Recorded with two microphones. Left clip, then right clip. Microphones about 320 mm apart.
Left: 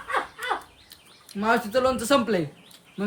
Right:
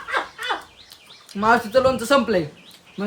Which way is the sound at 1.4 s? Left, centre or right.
Centre.